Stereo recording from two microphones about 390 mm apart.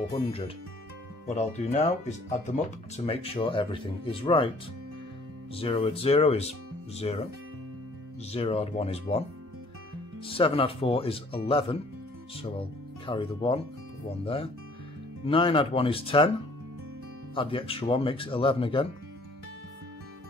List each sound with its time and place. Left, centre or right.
0.1 s speech: centre
5.5 s speech: centre
8.3 s speech: centre
10.2 s speech: centre
17.4 s speech: centre